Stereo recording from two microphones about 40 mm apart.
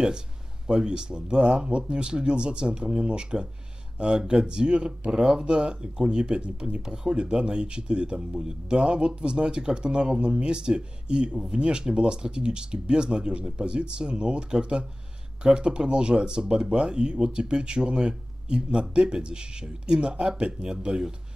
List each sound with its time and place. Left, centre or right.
0.7 s speech: centre